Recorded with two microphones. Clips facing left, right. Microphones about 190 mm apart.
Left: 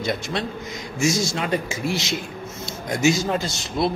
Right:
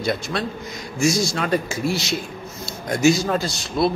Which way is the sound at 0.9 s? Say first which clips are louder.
Right 2 dB; 20° left (ahead or behind).